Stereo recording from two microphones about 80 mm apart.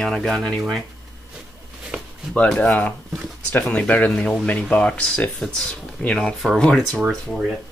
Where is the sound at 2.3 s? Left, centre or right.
Centre.